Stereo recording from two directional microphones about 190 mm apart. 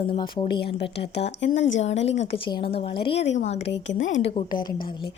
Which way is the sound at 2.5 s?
25° left (ahead or behind).